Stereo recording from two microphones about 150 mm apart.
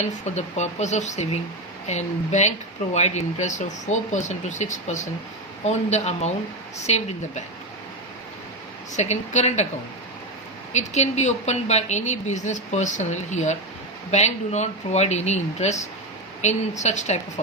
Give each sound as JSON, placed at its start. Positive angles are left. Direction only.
{"t": 0.0, "sound": "a woman's voice", "side_deg": 50}
{"t": 9.0, "sound": "a woman's voice", "side_deg": 50}
{"t": 10.7, "sound": "a woman's voice", "side_deg": 50}